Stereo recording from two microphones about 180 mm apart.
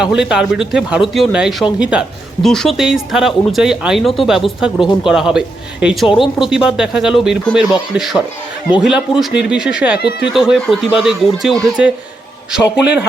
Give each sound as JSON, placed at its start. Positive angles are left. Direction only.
{"t": 0.0, "sound": "speech", "side_deg": -5}
{"t": 10.0, "sound": "speech", "side_deg": 65}
{"t": 10.3, "sound": "speech", "side_deg": 0}